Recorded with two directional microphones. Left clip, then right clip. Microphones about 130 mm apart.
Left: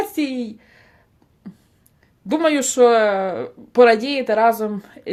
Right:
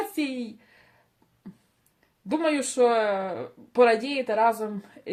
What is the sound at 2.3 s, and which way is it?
Speech, 30° left (ahead or behind).